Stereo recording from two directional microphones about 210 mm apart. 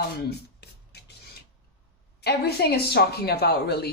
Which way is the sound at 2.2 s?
50° left (ahead or behind).